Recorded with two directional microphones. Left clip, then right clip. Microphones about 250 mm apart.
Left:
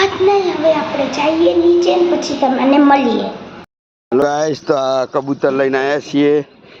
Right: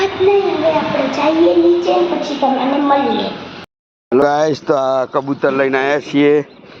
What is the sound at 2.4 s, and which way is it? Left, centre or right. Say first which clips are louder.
Speech: right 1 dB; centre.